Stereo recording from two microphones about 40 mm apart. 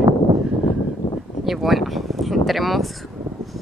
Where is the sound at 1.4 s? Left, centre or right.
Centre.